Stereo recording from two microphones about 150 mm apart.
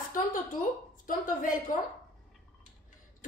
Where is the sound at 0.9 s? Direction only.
65° left (ahead or behind).